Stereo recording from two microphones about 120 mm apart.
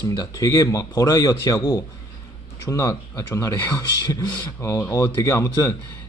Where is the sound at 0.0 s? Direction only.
30° left (ahead or behind).